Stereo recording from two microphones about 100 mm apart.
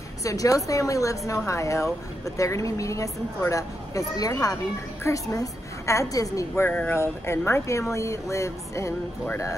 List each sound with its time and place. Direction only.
0.2 s speech: 35° left (ahead or behind)